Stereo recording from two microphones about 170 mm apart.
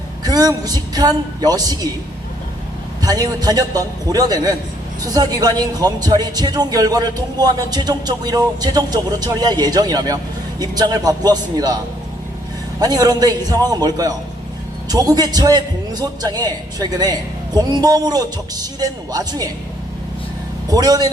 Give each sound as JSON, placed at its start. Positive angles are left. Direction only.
{"t": 0.3, "sound": "a man's voice", "side_deg": -20}
{"t": 3.0, "sound": "a man's voice", "side_deg": -20}
{"t": 12.8, "sound": "a man's voice", "side_deg": -25}
{"t": 20.7, "sound": "a man's voice", "side_deg": -20}